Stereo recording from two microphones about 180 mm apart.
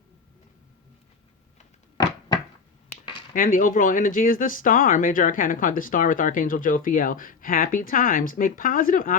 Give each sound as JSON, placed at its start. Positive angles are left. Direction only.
{"t": 2.0, "sound": "cupboard open or close", "side_deg": 20}
{"t": 3.3, "sound": "speech", "side_deg": 50}